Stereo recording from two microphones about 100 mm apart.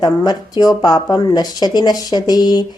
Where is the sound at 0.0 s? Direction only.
40° left (ahead or behind).